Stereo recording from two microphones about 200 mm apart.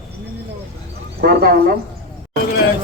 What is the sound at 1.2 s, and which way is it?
Speech, 50° right (ahead or behind).